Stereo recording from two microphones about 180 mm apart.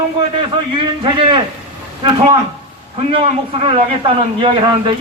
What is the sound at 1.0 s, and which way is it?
Speech, 30° right (ahead or behind).